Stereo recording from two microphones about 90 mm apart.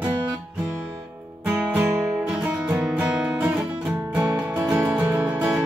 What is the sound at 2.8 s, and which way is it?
Music, 10° right (ahead or behind).